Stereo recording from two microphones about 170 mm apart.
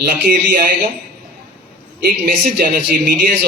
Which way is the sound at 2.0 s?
60° right (ahead or behind).